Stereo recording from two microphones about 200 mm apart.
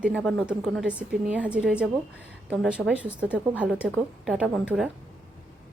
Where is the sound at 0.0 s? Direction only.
Centre (ahead or behind).